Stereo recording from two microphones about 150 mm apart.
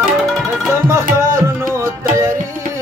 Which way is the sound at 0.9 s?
20° right (ahead or behind).